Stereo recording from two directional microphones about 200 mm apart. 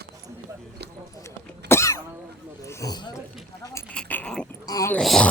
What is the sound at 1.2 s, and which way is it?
Cough, 15° left (ahead or behind).